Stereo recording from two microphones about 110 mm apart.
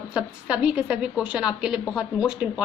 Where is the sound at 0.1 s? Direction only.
10° right (ahead or behind).